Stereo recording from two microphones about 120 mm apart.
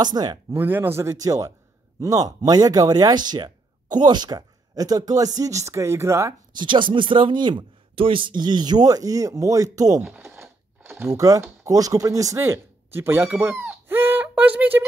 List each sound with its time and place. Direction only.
0.0 s speech: 35° right (ahead or behind)
0.5 s speech: 15° right (ahead or behind)
6.5 s speech: 40° right (ahead or behind)
11.1 s speech: 30° right (ahead or behind)